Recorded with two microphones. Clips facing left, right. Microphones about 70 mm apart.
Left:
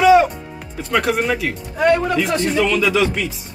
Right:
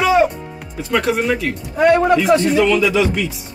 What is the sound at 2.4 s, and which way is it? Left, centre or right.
Speech, centre.